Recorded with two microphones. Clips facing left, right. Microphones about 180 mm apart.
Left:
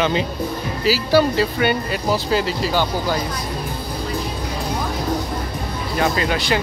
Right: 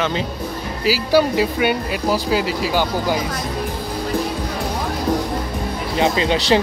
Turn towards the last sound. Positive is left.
turn(degrees=-25)  # may be behind; listen again after turning